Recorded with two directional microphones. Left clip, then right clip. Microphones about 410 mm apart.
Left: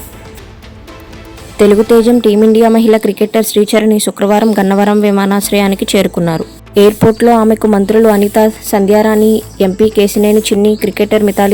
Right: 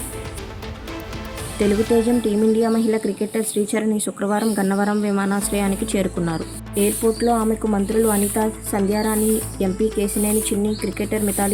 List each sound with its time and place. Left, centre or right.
2.0 s a woman's voice: left